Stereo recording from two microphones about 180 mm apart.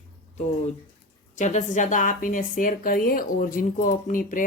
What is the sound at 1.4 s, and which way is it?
Speech, 40° left (ahead or behind).